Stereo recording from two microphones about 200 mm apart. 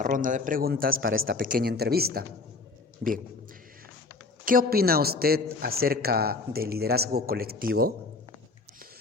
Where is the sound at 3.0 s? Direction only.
45° right (ahead or behind).